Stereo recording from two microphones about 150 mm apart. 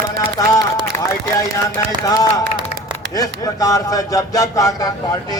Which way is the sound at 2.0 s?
25° left (ahead or behind).